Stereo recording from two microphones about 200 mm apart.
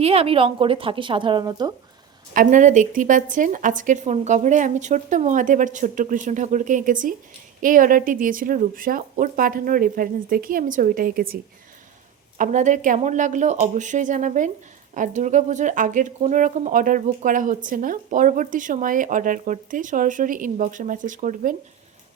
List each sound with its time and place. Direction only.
0.0 s a woman's voice: 30° right (ahead or behind)
2.3 s a woman's voice: 40° right (ahead or behind)
12.4 s speech: 35° right (ahead or behind)